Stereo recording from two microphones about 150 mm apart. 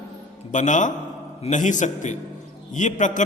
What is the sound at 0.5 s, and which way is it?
A man's voice, 55° left (ahead or behind).